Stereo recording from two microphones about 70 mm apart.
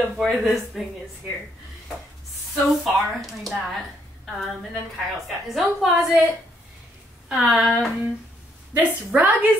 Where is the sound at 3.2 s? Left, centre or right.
Centre.